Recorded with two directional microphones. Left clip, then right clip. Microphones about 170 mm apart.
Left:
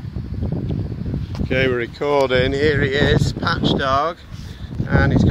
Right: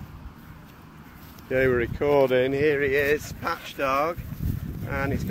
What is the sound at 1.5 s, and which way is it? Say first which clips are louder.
Speech: left 3 dB; 5° left (ahead or behind).